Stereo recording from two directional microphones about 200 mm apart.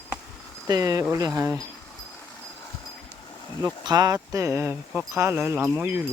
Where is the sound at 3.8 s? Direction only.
20° right (ahead or behind).